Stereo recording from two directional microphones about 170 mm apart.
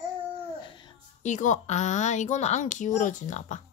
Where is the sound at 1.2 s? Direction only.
45° left (ahead or behind).